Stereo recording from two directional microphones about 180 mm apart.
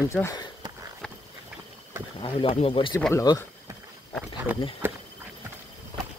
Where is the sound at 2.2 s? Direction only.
30° left (ahead or behind).